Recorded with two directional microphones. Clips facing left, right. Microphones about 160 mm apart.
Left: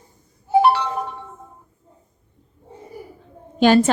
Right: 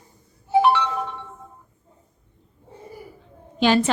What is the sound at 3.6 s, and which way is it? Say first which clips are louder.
Speech: left 4 dB; 45° left (ahead or behind).